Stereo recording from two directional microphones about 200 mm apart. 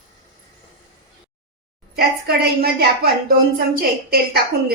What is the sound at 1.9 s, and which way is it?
Speech, 50° right (ahead or behind).